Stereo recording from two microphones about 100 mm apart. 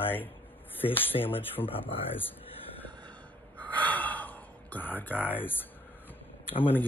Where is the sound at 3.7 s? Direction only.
15° left (ahead or behind).